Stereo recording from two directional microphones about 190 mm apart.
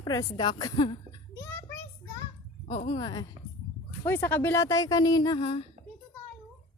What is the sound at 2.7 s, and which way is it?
Speech, 30° left (ahead or behind).